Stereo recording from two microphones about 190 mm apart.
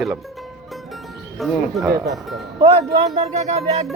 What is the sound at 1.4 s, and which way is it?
Speech, centre (ahead or behind).